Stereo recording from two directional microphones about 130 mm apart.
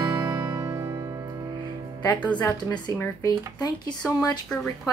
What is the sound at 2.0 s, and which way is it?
Music, 35° left (ahead or behind).